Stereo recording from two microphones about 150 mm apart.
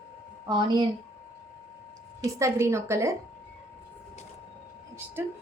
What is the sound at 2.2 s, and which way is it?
Speech, 20° right (ahead or behind).